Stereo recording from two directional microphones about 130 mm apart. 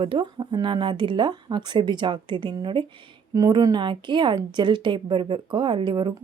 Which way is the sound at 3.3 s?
25° right (ahead or behind).